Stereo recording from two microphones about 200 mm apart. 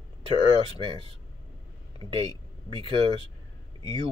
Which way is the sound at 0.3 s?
30° right (ahead or behind).